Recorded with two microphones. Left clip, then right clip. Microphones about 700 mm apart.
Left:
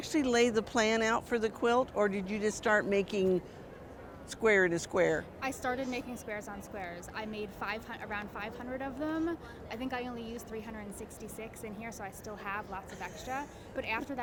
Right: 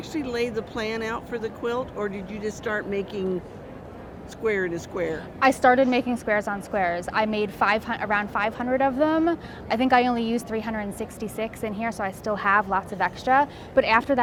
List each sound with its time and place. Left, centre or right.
0.1 s speech: left
4.4 s speech: left
5.4 s a woman's voice: right